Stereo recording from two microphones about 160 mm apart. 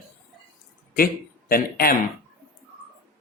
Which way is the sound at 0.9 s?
65° left (ahead or behind).